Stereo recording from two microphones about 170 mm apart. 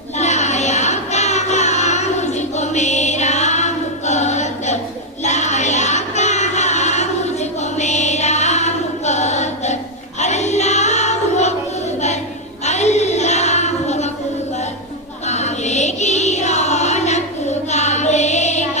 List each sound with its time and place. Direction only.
0.2 s child singing: 40° left (ahead or behind)
5.2 s music: 40° left (ahead or behind)
10.2 s choir: 40° left (ahead or behind)
12.6 s child singing: 40° left (ahead or behind)
15.3 s a sound: 40° left (ahead or behind)
17.7 s child singing: 40° left (ahead or behind)